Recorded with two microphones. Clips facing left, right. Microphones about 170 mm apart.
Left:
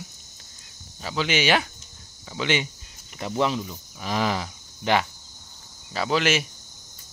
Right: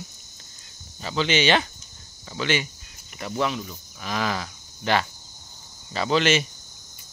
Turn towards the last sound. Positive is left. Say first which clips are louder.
# right 2 dB
turn(degrees=5)  # may be behind; listen again after turning